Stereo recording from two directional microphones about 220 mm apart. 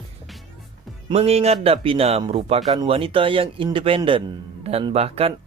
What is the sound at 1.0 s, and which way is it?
Speech, 25° right (ahead or behind).